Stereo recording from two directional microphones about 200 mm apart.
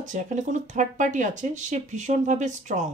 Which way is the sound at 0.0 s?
40° right (ahead or behind).